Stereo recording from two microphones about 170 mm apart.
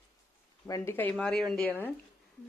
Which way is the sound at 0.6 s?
15° left (ahead or behind).